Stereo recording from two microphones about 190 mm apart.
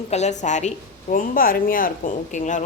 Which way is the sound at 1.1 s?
50° left (ahead or behind).